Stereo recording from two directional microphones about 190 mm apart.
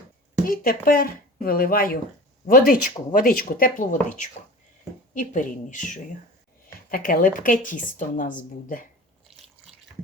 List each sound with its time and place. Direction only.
0.4 s a woman's voice: 50° left (ahead or behind)